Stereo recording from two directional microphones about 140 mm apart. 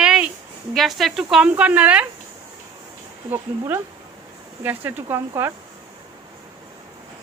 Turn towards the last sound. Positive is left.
turn(degrees=-15)  # may be behind; listen again after turning